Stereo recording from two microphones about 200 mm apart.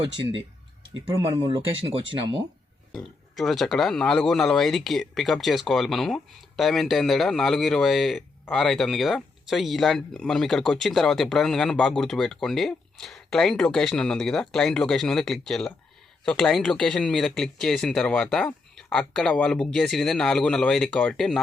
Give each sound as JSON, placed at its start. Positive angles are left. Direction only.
{"t": 1.2, "sound": "speech", "side_deg": -20}
{"t": 2.9, "sound": "speech", "side_deg": 0}